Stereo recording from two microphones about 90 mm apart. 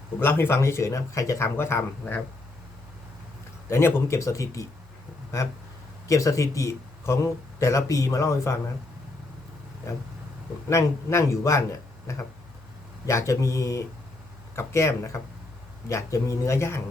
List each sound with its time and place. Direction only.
0.2 s speech: 25° left (ahead or behind)
3.7 s speech: 30° left (ahead or behind)
6.1 s speech: 35° left (ahead or behind)
10.7 s speech: 35° left (ahead or behind)